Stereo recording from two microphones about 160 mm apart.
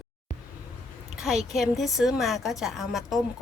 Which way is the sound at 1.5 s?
Centre (ahead or behind).